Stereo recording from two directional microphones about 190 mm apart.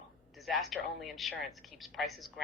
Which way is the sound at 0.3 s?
Centre (ahead or behind).